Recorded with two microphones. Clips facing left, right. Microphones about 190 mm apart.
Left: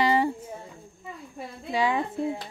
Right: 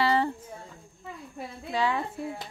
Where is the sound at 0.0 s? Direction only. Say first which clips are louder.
Left 2 dB; 15° left (ahead or behind).